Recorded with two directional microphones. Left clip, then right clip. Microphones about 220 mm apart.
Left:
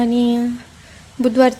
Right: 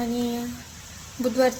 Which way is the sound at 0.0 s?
40° left (ahead or behind).